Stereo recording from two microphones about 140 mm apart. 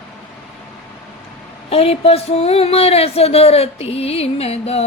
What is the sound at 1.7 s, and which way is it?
Speech, 45° left (ahead or behind).